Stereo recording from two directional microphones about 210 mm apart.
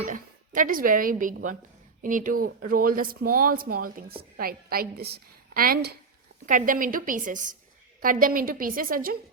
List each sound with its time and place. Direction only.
0.1 s a woman's voice: 40° right (ahead or behind)